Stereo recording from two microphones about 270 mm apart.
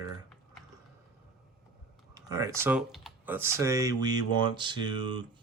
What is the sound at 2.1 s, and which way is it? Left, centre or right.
Speech, centre.